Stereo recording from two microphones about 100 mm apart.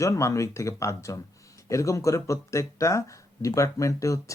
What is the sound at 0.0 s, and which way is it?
Speech, 30° left (ahead or behind).